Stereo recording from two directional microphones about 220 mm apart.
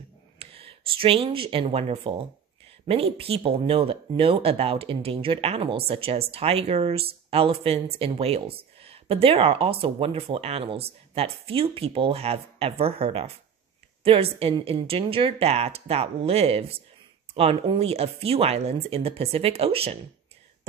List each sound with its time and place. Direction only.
0.4 s speech: 25° right (ahead or behind)